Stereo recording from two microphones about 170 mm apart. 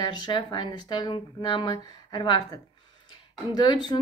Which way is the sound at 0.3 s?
25° left (ahead or behind).